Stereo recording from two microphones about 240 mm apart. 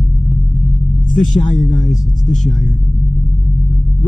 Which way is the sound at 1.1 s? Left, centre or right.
Left.